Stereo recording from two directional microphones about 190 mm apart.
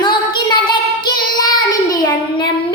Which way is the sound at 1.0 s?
20° left (ahead or behind).